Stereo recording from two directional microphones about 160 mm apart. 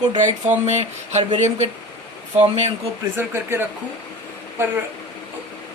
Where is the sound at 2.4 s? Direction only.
40° right (ahead or behind).